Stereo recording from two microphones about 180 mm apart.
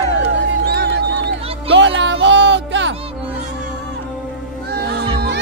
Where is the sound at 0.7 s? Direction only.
65° right (ahead or behind).